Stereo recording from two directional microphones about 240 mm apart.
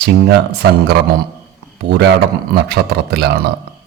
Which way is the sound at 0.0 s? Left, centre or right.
Right.